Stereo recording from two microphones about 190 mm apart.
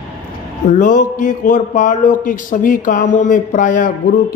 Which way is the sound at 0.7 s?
40° left (ahead or behind).